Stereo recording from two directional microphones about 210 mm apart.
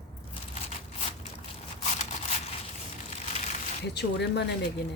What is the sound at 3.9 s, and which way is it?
Speech, 55° left (ahead or behind).